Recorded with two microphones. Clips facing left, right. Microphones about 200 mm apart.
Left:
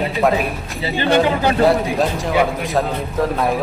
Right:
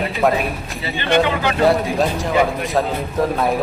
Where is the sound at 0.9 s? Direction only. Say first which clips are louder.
Left 2 dB; 35° left (ahead or behind).